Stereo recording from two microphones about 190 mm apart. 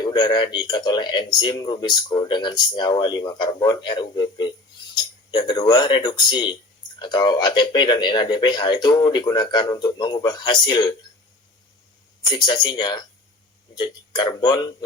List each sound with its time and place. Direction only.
0.0 s speech: 20° left (ahead or behind)
12.2 s speech: 20° left (ahead or behind)